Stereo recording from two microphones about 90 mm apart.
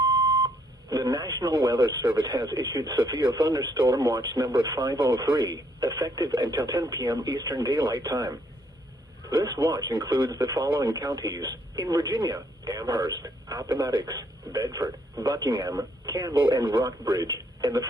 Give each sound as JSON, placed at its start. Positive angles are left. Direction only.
{"t": 0.0, "sound": "beep", "side_deg": -45}
{"t": 2.1, "sound": "speech", "side_deg": -50}